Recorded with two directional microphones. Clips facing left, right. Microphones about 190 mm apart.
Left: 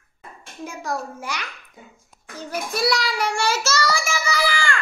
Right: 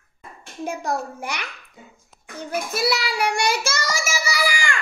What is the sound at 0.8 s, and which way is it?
Speech, 60° right (ahead or behind).